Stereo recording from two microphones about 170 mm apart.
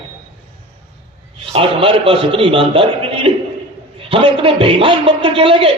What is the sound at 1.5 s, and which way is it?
A man's voice, 35° right (ahead or behind).